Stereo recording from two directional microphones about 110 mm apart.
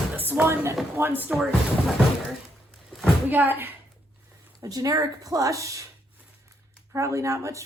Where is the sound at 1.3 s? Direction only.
Centre (ahead or behind).